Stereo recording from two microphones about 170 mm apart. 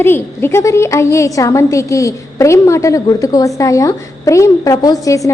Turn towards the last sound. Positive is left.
turn(degrees=20)  # may be behind; listen again after turning